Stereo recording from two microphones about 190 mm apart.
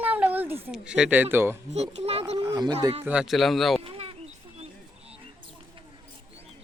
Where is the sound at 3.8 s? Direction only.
30° right (ahead or behind).